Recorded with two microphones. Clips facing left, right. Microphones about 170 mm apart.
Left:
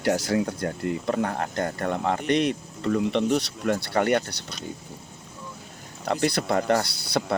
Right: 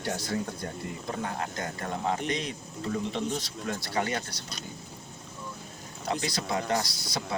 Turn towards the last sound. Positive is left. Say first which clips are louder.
# left 7 dB
turn(degrees=65)  # may be behind; listen again after turning